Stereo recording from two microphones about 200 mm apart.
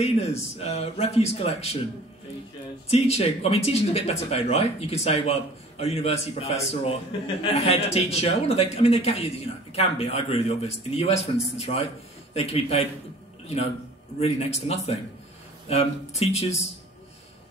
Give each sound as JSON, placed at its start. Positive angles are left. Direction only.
{"t": 0.0, "sound": "speech", "side_deg": 30}
{"t": 2.9, "sound": "speech", "side_deg": 30}
{"t": 14.2, "sound": "speech", "side_deg": 30}